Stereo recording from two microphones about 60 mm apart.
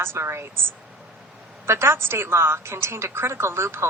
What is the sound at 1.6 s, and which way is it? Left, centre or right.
A woman's voice, right.